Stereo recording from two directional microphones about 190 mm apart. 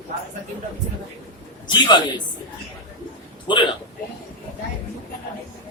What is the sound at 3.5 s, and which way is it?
Speech, 25° left (ahead or behind).